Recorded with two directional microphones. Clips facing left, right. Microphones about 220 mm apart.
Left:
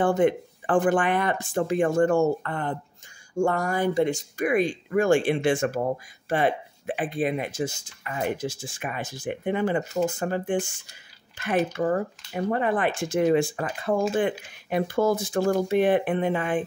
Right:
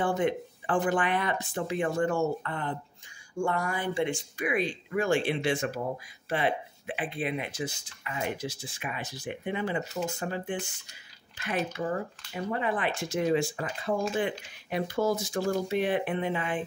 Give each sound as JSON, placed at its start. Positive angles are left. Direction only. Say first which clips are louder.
{"t": 0.0, "sound": "speech", "louder": "left 6 dB", "side_deg": 50}